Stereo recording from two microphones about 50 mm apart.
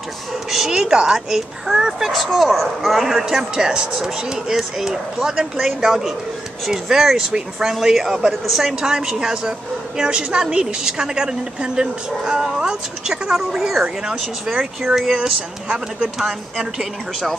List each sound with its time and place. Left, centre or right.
0.7 s speech: centre
2.0 s a man's voice: centre
7.7 s a man's voice: centre
8.8 s speech: centre
16.2 s speech: centre